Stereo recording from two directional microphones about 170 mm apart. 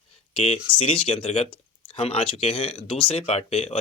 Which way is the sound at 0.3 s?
35° left (ahead or behind).